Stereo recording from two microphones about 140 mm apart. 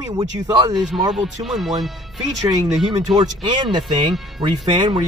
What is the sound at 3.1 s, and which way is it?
Speech, 35° right (ahead or behind).